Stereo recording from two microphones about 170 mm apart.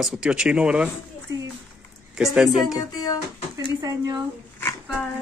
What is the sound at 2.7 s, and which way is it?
Music, 20° left (ahead or behind).